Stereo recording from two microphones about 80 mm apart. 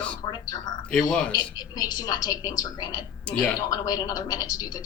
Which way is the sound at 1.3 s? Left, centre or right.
Left.